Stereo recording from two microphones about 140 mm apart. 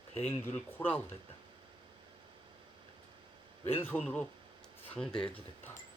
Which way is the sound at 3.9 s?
10° left (ahead or behind).